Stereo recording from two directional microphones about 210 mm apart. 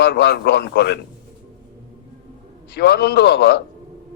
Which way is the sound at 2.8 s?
50° left (ahead or behind).